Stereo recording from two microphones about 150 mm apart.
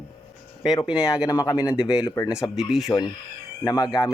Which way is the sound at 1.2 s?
25° left (ahead or behind).